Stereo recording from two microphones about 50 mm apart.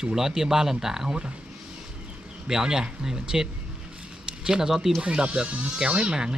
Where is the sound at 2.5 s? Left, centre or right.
Centre.